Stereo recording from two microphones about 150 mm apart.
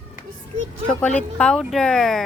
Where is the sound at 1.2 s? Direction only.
5° left (ahead or behind).